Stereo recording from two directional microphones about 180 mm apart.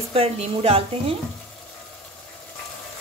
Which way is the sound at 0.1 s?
35° right (ahead or behind).